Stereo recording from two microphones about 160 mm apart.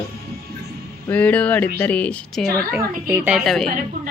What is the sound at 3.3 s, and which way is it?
Speech, centre (ahead or behind).